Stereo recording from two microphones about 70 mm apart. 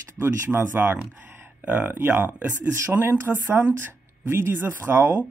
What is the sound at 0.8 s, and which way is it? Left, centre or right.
Speech, right.